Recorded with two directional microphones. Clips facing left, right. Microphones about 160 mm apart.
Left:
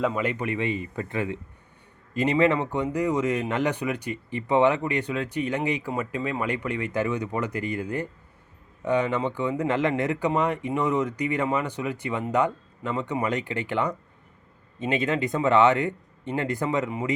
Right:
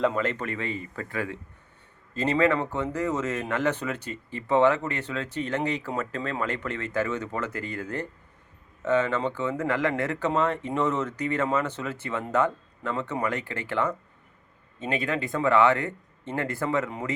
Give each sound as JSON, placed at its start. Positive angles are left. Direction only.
{"t": 0.0, "sound": "speech", "side_deg": 10}